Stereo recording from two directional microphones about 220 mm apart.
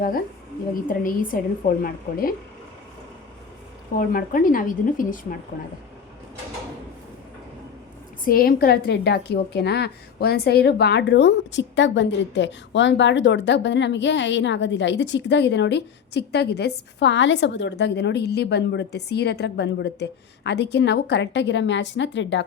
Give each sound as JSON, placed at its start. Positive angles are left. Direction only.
{"t": 0.9, "sound": "a woman's voice", "side_deg": 40}
{"t": 3.9, "sound": "a woman's voice", "side_deg": 40}
{"t": 8.2, "sound": "a woman's voice", "side_deg": 40}